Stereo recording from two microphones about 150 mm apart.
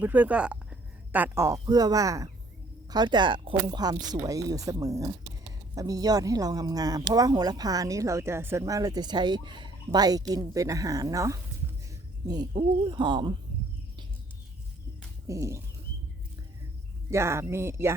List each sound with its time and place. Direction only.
0.0 s speech: 10° right (ahead or behind); by 13.3 s 30° right (ahead or behind)
15.3 s speech: 20° right (ahead or behind)
17.1 s speech: 15° right (ahead or behind)